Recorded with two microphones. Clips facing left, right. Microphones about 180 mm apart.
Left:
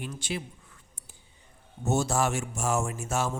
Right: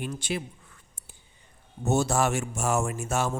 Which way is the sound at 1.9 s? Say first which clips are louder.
Right 2 dB; 60° right (ahead or behind).